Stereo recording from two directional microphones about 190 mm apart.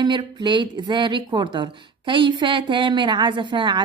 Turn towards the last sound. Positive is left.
turn(degrees=-25)  # may be behind; listen again after turning